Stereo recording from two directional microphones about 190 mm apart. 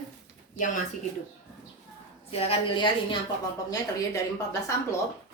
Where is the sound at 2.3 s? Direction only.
30° left (ahead or behind).